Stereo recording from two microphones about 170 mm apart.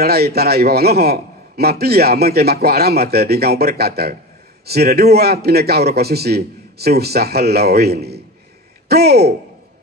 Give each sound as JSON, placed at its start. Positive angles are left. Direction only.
{"t": 0.0, "sound": "a man's voice", "side_deg": -70}